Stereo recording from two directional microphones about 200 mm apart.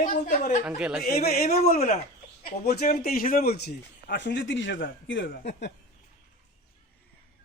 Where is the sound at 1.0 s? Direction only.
35° left (ahead or behind).